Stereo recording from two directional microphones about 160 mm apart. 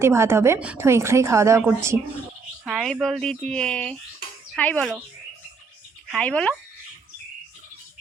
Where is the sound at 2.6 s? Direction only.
Centre (ahead or behind).